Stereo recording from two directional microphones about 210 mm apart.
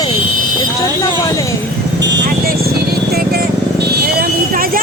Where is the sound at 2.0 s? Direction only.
45° right (ahead or behind).